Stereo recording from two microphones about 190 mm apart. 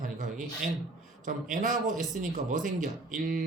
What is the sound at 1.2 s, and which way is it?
Speech, 45° right (ahead or behind).